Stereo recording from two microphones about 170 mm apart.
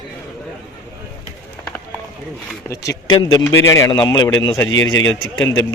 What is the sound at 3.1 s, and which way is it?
A man's voice, 25° left (ahead or behind).